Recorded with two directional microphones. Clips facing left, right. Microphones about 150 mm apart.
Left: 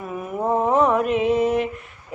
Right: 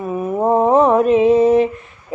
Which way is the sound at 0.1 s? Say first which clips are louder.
Right 7 dB; 35° right (ahead or behind).